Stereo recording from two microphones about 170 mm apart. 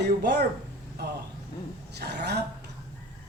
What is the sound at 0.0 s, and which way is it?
Speech, 80° right.